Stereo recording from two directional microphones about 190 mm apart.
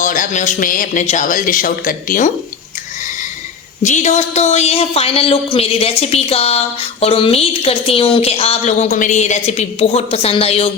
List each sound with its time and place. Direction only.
0.0 s speech: 45° left (ahead or behind)
3.8 s a woman's voice: 40° left (ahead or behind)